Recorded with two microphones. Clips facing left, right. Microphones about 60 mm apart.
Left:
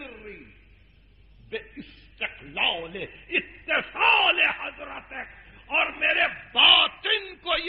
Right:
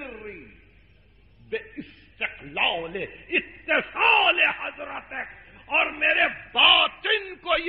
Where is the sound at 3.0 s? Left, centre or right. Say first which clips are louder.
Right 2 dB; centre.